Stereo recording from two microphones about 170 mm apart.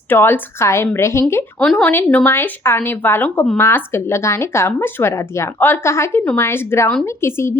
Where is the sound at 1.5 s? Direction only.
5° left (ahead or behind).